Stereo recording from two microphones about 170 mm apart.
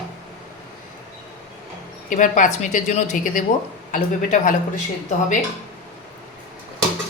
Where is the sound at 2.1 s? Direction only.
50° left (ahead or behind).